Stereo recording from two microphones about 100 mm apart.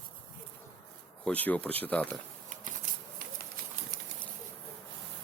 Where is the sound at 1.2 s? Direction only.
15° left (ahead or behind).